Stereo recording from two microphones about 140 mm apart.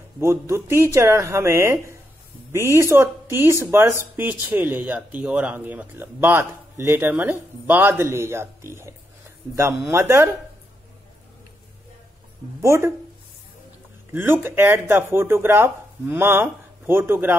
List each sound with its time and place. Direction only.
0.2 s speech: 20° right (ahead or behind)
12.6 s speech: 20° right (ahead or behind)
14.1 s speech: 15° right (ahead or behind)